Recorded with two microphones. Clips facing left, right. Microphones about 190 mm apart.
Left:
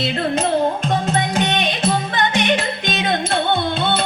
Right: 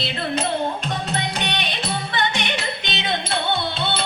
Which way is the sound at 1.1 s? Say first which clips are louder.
Left 6 dB; 45° left (ahead or behind).